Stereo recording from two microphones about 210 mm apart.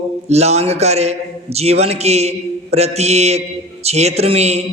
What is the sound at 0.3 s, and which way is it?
A man's voice, 30° right (ahead or behind).